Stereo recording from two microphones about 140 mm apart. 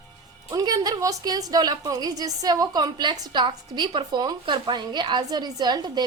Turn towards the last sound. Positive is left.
turn(degrees=-30)  # may be behind; listen again after turning